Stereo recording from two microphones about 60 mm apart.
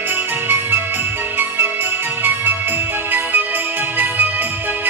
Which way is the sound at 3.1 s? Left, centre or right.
Right.